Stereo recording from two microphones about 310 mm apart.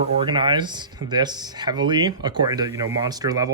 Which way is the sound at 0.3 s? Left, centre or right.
Centre.